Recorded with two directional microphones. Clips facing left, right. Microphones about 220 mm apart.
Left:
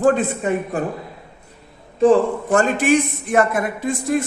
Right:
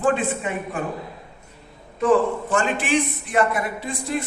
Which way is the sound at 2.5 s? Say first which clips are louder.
Left 7 dB; 45° left (ahead or behind).